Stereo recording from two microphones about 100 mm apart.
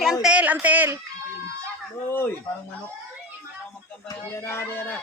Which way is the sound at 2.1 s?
25° left (ahead or behind).